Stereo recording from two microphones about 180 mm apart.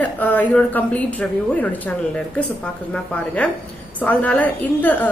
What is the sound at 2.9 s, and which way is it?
A woman's voice, 5° left (ahead or behind).